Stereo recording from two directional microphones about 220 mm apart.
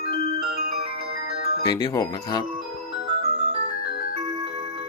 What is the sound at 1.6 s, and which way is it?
Speech, 15° left (ahead or behind).